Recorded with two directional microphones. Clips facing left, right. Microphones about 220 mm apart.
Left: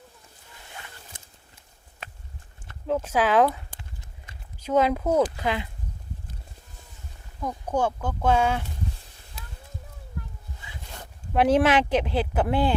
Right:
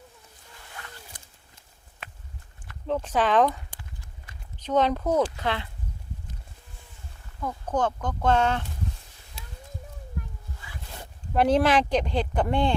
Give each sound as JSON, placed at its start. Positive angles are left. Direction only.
{"t": 0.8, "sound": "zipper", "side_deg": 25}
{"t": 1.1, "sound": "a sound", "side_deg": 25}
{"t": 2.8, "sound": "speech", "side_deg": 5}
{"t": 4.6, "sound": "speech", "side_deg": 10}
{"t": 7.4, "sound": "speech", "side_deg": 10}
{"t": 11.3, "sound": "speech", "side_deg": 5}